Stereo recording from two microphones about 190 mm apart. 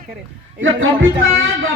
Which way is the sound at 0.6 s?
90° right.